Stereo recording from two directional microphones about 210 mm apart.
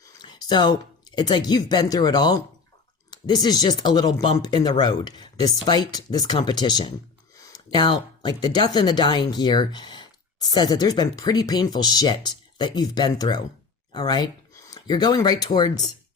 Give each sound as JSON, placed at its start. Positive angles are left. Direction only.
{"t": 0.0, "sound": "speech", "side_deg": 20}